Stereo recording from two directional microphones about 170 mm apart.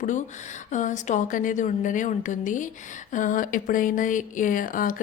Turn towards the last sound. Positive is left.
turn(degrees=55)  # may be behind; listen again after turning